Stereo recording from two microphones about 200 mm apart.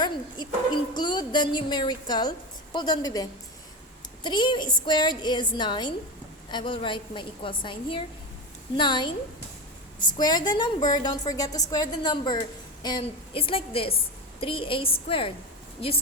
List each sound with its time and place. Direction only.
0.0 s speech: 20° left (ahead or behind)